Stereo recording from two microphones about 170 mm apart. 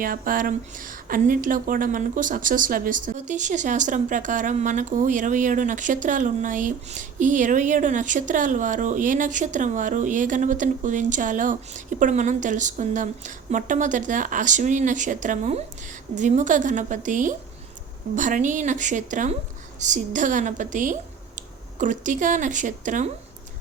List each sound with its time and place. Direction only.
0.0 s speech: 55° right (ahead or behind)